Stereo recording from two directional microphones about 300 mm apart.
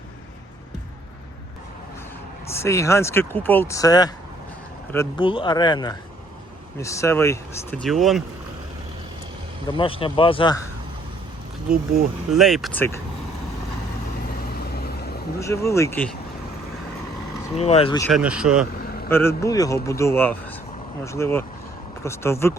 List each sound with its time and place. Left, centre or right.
2.5 s speech: centre
9.6 s speech: centre
12.3 s speech: centre
14.5 s vehicle: left
15.4 s speech: centre
17.6 s speech: centre
18.1 s speech: centre
19.0 s speech: centre